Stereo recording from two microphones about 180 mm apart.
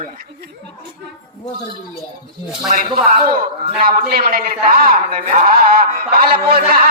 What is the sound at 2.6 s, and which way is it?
Speech, 40° right (ahead or behind).